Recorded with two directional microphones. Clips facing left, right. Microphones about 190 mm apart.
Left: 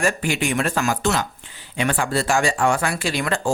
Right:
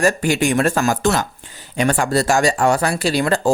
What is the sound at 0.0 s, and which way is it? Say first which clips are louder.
Speech: right 5 dB; 40° right (ahead or behind).